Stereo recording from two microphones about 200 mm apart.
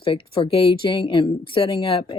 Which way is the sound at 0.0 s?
25° left (ahead or behind).